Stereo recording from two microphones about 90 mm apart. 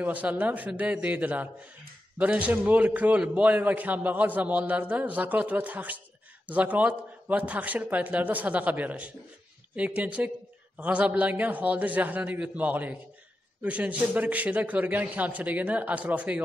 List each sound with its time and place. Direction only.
0.0 s a man's voice: 20° right (ahead or behind)